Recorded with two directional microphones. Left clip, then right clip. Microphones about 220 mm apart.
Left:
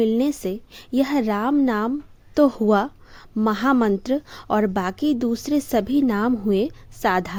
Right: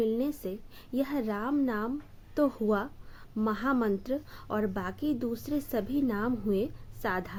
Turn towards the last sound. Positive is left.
turn(degrees=40)  # may be behind; listen again after turning